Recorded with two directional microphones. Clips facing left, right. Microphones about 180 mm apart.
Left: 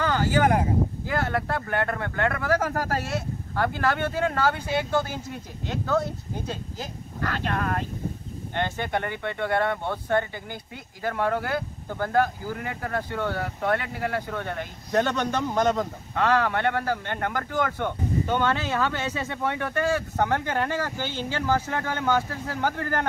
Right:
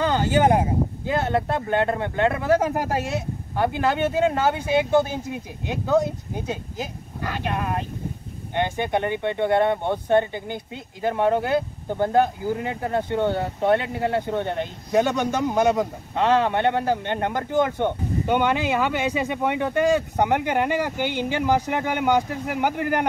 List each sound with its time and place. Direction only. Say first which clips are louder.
0.0 s speech: right 3 dB; 20° right (ahead or behind)
14.9 s speech: right 3 dB; 10° right (ahead or behind)